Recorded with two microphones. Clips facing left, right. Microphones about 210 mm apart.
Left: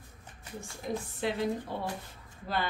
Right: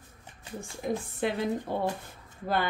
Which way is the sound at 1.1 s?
50° right (ahead or behind).